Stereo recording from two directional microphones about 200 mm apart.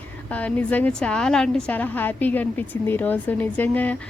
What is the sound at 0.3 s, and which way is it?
A woman's voice, 5° left (ahead or behind).